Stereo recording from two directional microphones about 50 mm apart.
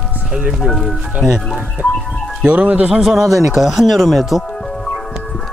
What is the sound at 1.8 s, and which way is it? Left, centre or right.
Speech, right.